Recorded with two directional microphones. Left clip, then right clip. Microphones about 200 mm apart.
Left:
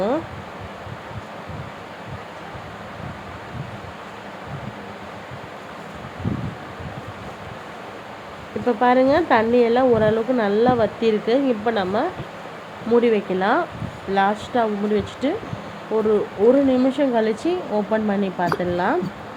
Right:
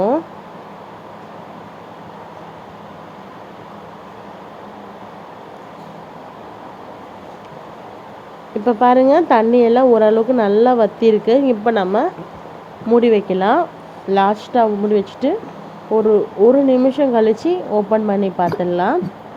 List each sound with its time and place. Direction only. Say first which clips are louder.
8.6 s speech: right 5 dB; 30° right (ahead or behind)
15.9 s speech: right 6 dB; 10° right (ahead or behind)
16.6 s speech: right 5 dB; 25° right (ahead or behind)